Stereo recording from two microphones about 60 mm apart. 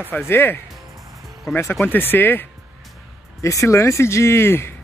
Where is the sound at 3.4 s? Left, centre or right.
Left.